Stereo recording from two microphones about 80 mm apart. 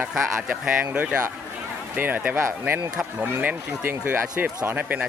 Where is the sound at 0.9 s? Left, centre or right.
Centre.